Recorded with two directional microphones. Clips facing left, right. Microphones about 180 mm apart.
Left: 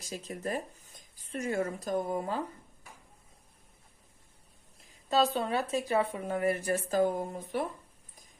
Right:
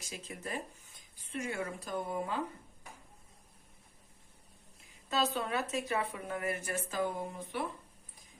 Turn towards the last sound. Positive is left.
turn(degrees=40)  # may be behind; listen again after turning